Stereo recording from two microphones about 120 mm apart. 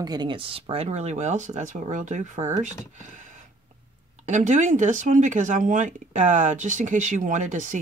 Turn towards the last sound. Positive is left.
turn(degrees=-90)